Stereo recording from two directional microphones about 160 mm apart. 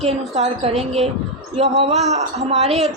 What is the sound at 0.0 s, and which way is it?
A woman's voice, 40° right (ahead or behind).